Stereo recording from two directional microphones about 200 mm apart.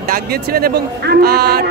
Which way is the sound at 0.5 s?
50° right (ahead or behind).